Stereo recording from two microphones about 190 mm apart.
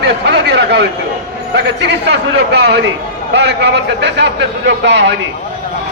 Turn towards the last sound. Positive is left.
turn(degrees=-65)  # may be behind; listen again after turning